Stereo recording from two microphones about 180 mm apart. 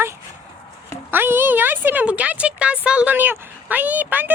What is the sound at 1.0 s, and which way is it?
Speech, 10° right (ahead or behind).